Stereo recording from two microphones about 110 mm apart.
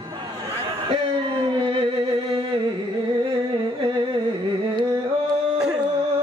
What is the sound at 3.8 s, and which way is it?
Carnatic music, 45° right (ahead or behind).